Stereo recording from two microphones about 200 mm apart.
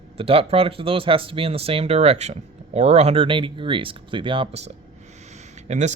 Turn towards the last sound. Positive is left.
turn(degrees=-35)  # may be behind; listen again after turning